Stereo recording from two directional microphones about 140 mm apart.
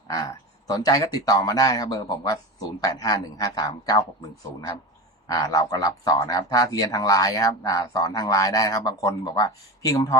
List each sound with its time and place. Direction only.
0.7 s speech: 25° left (ahead or behind)
5.3 s speech: 25° left (ahead or behind)